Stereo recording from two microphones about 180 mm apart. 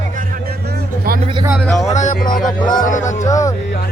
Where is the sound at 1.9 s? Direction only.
40° left (ahead or behind).